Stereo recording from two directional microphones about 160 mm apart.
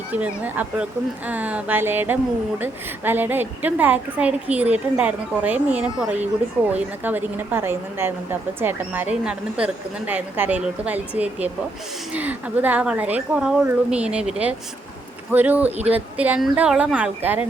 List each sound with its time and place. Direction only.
0.1 s a woman's voice: 10° right (ahead or behind)